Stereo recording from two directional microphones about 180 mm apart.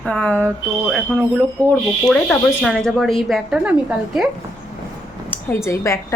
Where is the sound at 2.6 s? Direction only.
Centre (ahead or behind).